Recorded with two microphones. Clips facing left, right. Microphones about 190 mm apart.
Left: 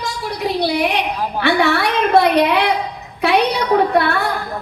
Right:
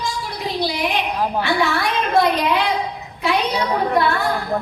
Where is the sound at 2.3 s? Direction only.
65° left (ahead or behind).